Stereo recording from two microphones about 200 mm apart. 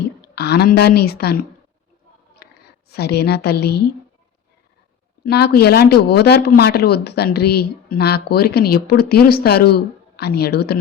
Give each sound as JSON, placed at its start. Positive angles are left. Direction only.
{"t": 0.3, "sound": "speech", "side_deg": 55}
{"t": 2.4, "sound": "a sound", "side_deg": 50}
{"t": 2.9, "sound": "speech", "side_deg": 55}
{"t": 5.2, "sound": "speech", "side_deg": 55}